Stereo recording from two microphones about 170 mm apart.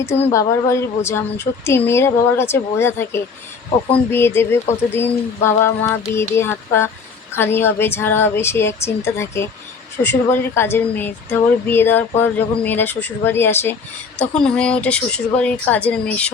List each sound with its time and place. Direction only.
0.2 s speech: 15° left (ahead or behind)